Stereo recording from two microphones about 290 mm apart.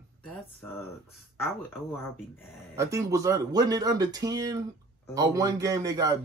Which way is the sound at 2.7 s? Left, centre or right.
Centre.